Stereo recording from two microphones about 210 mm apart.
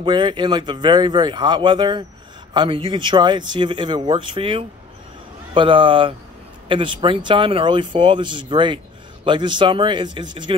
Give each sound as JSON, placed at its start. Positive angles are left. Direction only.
{"t": 0.0, "sound": "speech", "side_deg": -25}